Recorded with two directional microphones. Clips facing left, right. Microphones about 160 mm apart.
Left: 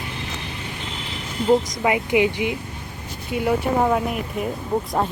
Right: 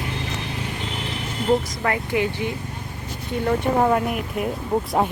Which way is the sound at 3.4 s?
Centre (ahead or behind).